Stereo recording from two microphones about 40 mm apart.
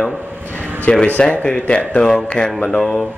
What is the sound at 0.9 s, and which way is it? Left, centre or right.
Speech, left.